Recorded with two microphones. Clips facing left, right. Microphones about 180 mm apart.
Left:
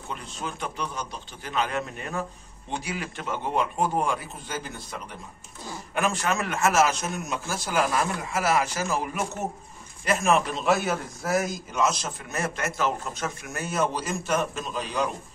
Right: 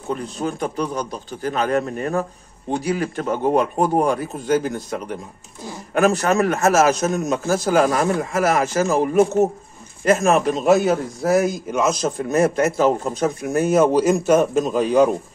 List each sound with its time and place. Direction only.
0.1 s a man's voice: 40° right (ahead or behind)
11.3 s a man's voice: 55° right (ahead or behind)